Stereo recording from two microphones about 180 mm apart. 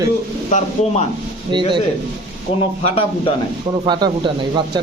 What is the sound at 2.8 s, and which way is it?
Speech, 30° left (ahead or behind).